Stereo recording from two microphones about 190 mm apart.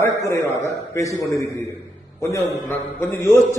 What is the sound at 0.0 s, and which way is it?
A man's voice, 15° left (ahead or behind).